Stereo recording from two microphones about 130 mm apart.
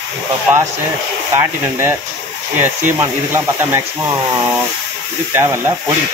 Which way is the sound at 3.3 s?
20° right (ahead or behind).